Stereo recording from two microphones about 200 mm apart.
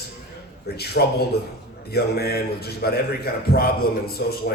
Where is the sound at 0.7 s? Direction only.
55° left (ahead or behind).